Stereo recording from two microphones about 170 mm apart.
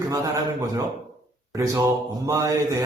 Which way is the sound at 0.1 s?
20° right (ahead or behind).